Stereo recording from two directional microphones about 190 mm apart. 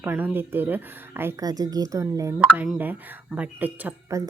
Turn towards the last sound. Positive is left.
turn(degrees=-15)  # may be behind; listen again after turning